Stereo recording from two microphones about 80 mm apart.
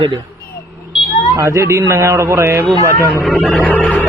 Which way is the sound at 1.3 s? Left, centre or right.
Right.